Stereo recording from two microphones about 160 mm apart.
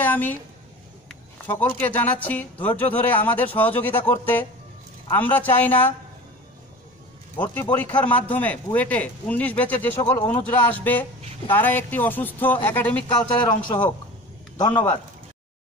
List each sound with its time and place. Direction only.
0.0 s a sound: 10° left (ahead or behind)
1.5 s speech: 10° left (ahead or behind)
7.3 s speech: 15° left (ahead or behind)
14.6 s speech: 25° left (ahead or behind)